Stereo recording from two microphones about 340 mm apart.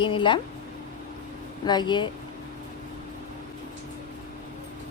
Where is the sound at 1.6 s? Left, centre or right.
Centre.